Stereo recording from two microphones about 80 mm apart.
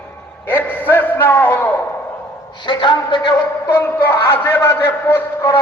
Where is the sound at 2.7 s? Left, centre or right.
Left.